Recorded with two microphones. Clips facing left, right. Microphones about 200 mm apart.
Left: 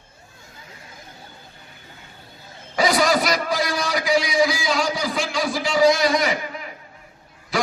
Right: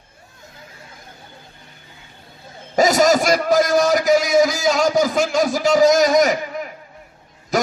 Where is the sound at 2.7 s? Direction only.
45° right (ahead or behind).